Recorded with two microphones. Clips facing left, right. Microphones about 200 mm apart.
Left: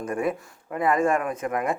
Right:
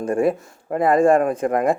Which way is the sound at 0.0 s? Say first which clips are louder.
Right 7 dB; 30° right (ahead or behind).